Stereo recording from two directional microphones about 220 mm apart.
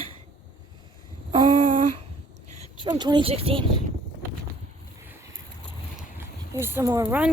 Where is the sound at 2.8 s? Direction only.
20° right (ahead or behind).